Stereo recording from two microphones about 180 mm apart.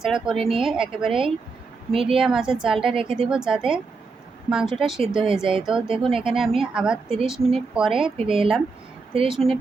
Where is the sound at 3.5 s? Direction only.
5° right (ahead or behind).